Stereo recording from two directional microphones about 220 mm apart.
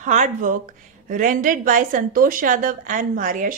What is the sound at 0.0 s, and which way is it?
A woman's voice, 35° right (ahead or behind).